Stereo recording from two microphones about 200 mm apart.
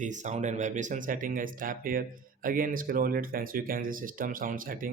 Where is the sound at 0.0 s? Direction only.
35° right (ahead or behind).